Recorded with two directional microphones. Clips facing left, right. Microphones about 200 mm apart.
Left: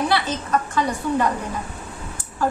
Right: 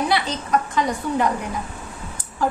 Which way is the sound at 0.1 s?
15° right (ahead or behind).